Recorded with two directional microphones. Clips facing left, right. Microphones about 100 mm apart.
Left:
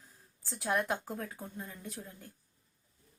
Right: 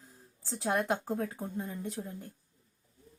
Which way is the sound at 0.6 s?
25° right (ahead or behind).